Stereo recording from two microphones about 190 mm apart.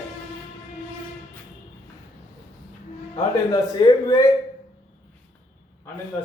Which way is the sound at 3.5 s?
25° left (ahead or behind).